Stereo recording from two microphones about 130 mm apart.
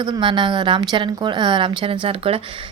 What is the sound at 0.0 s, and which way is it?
A woman's voice, 35° right (ahead or behind).